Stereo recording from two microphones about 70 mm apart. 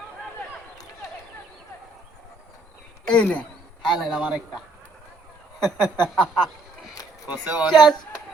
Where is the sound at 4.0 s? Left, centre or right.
Centre.